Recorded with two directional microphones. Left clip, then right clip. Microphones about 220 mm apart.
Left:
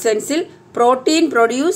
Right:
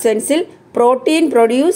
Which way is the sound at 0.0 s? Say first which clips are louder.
Right 3 dB; 25° right (ahead or behind).